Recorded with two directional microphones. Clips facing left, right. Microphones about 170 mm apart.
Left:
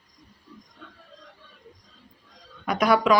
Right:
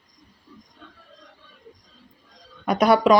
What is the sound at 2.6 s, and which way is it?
Speech, 30° right (ahead or behind).